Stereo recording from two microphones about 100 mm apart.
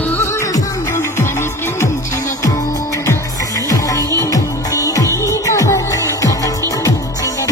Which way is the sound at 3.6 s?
35° left (ahead or behind).